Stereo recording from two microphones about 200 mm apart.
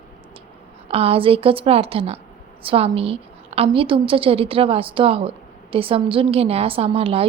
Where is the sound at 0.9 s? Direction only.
30° right (ahead or behind).